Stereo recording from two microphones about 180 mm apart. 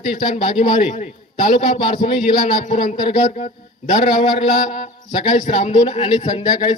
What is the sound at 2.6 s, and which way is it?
Speech, 45° left (ahead or behind).